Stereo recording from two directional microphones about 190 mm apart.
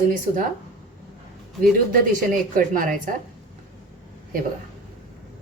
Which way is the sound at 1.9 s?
45° right (ahead or behind).